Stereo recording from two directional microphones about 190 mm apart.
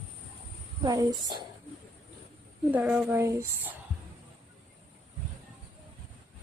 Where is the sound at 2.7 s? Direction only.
5° right (ahead or behind).